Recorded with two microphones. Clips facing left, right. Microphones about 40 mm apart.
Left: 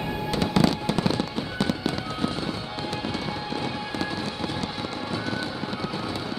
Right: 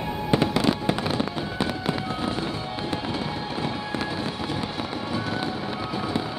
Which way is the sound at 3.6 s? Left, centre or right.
Centre.